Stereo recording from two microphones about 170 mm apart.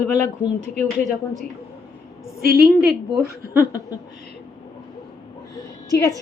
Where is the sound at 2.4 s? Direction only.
65° right (ahead or behind).